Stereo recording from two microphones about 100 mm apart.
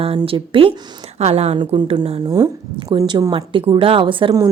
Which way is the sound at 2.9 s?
50° right (ahead or behind).